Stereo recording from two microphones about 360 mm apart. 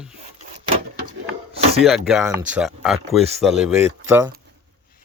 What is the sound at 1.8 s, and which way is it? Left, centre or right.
Speech, centre.